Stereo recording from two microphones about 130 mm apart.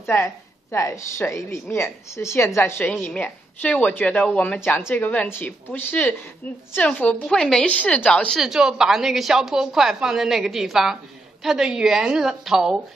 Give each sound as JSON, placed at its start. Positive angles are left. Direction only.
{"t": 0.0, "sound": "a woman's voice", "side_deg": 20}